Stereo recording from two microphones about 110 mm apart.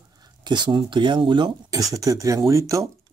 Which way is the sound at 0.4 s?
45° right (ahead or behind).